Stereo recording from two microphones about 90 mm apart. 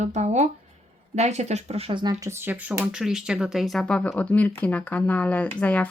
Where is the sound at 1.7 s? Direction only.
90° right.